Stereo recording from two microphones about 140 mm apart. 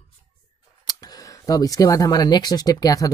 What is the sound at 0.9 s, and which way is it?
Speech, 25° left (ahead or behind).